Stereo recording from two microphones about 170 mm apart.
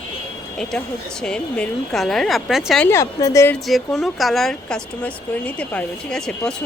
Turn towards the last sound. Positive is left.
turn(degrees=5)  # may be behind; listen again after turning